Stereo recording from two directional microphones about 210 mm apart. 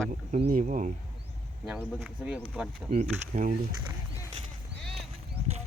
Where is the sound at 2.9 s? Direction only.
35° right (ahead or behind).